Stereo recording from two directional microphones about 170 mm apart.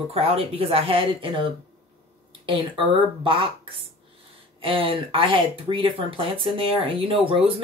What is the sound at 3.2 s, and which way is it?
Speech, 30° right (ahead or behind).